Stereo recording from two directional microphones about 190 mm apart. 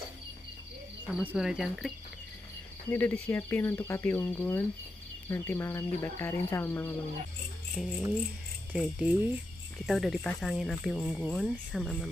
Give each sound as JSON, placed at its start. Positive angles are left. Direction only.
{"t": 1.2, "sound": "speech", "side_deg": -5}
{"t": 2.9, "sound": "speech", "side_deg": 10}
{"t": 7.7, "sound": "speech", "side_deg": -5}